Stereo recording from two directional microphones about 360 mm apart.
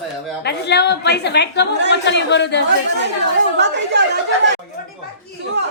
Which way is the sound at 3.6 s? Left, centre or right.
Right.